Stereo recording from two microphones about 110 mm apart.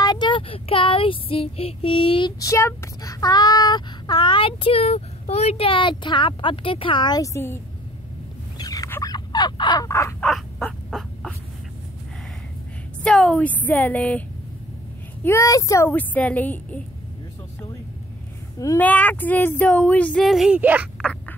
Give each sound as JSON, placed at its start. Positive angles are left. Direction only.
{"t": 0.0, "sound": "child singing", "side_deg": 40}
{"t": 2.4, "sound": "speech", "side_deg": 25}
{"t": 7.3, "sound": "a child's voice", "side_deg": 25}
{"t": 8.5, "sound": "a sound", "side_deg": 35}
{"t": 9.0, "sound": "fowl", "side_deg": 40}
{"t": 9.8, "sound": "a child's voice", "side_deg": 30}
{"t": 10.6, "sound": "a sound", "side_deg": 10}
{"t": 13.0, "sound": "speech", "side_deg": 5}
{"t": 15.2, "sound": "a child's voice", "side_deg": 25}
{"t": 15.9, "sound": "speech", "side_deg": 15}
{"t": 18.8, "sound": "speech", "side_deg": 15}
{"t": 20.2, "sound": "speech", "side_deg": 0}